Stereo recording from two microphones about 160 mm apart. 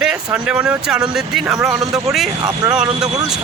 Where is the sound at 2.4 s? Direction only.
25° right (ahead or behind).